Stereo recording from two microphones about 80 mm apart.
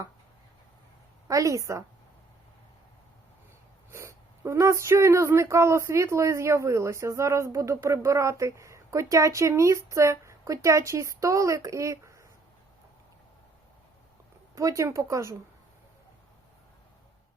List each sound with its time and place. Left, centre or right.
1.3 s speech: right
3.9 s speech: right
14.5 s speech: right